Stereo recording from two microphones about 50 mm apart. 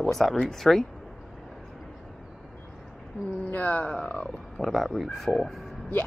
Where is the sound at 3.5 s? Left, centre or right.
Left.